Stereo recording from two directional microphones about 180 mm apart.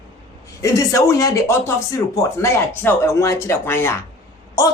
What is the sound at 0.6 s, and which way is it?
A man's voice, 15° left (ahead or behind).